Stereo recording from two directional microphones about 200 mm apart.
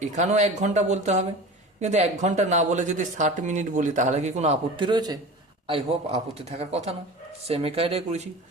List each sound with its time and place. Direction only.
0.0 s speech: 35° right (ahead or behind)